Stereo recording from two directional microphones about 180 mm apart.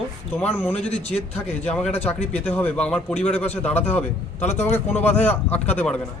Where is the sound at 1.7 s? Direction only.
5° left (ahead or behind).